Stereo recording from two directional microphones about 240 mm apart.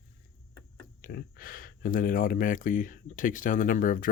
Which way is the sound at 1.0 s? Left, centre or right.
Left.